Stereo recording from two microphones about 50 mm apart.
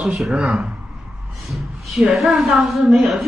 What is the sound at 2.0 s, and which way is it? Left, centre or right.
A woman's voice, centre.